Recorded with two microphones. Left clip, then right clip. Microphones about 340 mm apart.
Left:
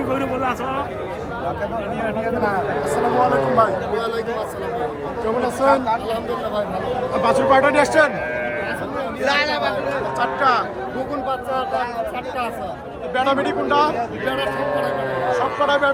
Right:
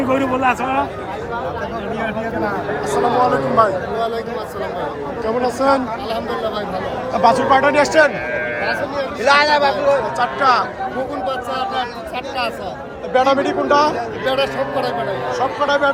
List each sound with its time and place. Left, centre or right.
0.1 s a sound: right
3.6 s a man's voice: centre
5.5 s a man's voice: centre
7.2 s a man's voice: centre
9.2 s speech: right
10.2 s a man's voice: centre
13.1 s a man's voice: centre